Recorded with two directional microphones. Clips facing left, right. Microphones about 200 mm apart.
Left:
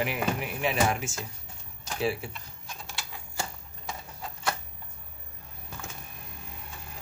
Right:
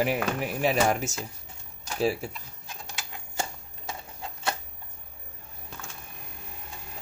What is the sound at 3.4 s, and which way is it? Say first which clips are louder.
Typewriter: right 3 dB; 25° right (ahead or behind).